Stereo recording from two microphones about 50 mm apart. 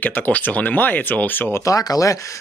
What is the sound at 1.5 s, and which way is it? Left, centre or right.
Speech, left.